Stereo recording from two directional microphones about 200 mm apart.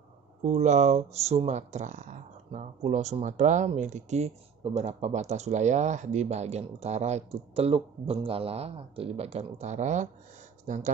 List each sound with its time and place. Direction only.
0.4 s speech: 35° right (ahead or behind)